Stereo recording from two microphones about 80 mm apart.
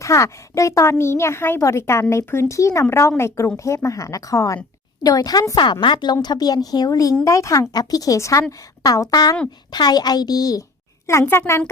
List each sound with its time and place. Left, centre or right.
0.0 s a woman's voice: left
5.8 s speech: left
6.2 s a woman's voice: left
7.7 s speech: left
9.7 s a woman's voice: left
11.0 s a woman's voice: left